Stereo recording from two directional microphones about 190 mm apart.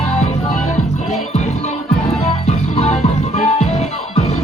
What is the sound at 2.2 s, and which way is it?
Music, 35° left (ahead or behind).